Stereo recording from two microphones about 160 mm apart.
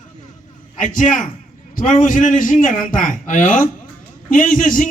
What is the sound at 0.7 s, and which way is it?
A man's voice, 55° left (ahead or behind).